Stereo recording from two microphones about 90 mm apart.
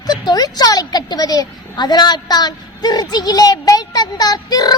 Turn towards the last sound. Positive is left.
turn(degrees=45)  # may be behind; listen again after turning